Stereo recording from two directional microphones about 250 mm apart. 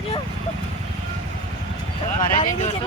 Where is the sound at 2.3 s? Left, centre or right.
Left.